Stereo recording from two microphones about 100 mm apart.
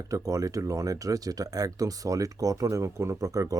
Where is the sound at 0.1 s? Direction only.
35° right (ahead or behind).